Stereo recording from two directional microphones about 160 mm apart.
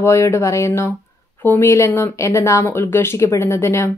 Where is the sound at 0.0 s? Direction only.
20° left (ahead or behind).